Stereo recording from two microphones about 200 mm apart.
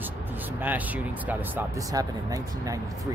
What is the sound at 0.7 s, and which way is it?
Speech, 10° right (ahead or behind).